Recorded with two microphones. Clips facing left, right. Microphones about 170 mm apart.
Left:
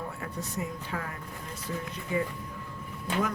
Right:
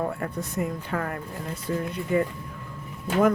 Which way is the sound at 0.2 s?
55° right (ahead or behind).